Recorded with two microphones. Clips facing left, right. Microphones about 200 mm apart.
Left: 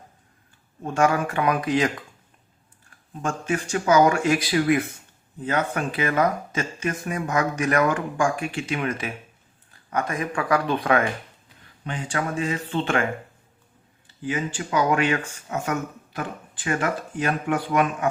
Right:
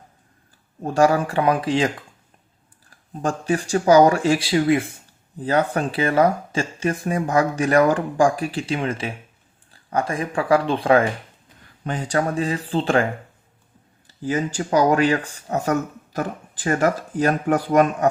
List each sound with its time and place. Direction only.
0.8 s speech: 35° right (ahead or behind)
3.1 s speech: 35° right (ahead or behind)
14.2 s speech: 40° right (ahead or behind)